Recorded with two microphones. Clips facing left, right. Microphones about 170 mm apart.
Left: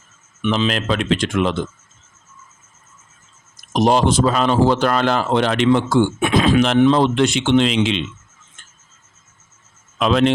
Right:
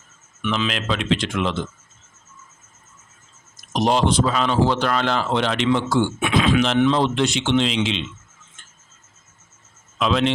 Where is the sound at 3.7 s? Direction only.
50° left (ahead or behind).